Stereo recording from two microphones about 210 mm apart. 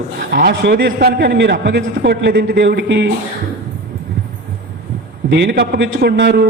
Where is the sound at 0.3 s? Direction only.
50° right (ahead or behind).